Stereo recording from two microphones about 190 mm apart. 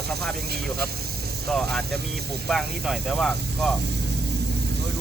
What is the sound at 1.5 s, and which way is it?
Speech, centre (ahead or behind).